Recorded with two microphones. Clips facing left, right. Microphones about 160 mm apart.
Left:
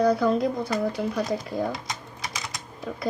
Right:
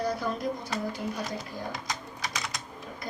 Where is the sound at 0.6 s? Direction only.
70° left (ahead or behind).